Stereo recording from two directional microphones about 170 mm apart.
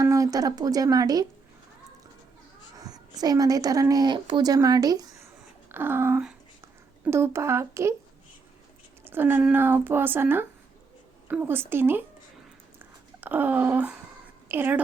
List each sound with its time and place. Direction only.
0.0 s a woman's voice: 20° right (ahead or behind)
2.7 s a woman's voice: 20° right (ahead or behind)
9.0 s speech: 10° right (ahead or behind)
13.2 s a woman's voice: 10° right (ahead or behind)